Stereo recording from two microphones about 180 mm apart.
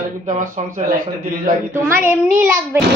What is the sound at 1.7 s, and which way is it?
A child's voice, 15° right (ahead or behind).